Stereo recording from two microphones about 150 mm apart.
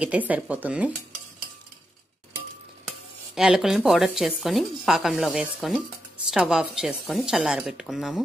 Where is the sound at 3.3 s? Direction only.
5° right (ahead or behind).